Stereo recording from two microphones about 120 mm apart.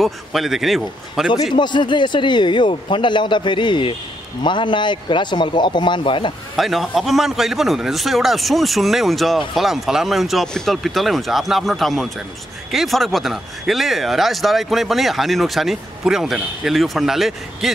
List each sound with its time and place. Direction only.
0.0 s speech: centre (ahead or behind)
1.5 s a man's voice: 40° left (ahead or behind)
6.5 s speech: centre (ahead or behind)